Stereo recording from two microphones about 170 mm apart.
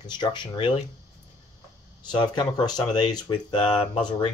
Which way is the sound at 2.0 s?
25° left (ahead or behind).